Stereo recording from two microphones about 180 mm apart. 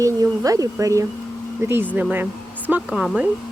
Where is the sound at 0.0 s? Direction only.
20° right (ahead or behind); by 3.2 s centre (ahead or behind).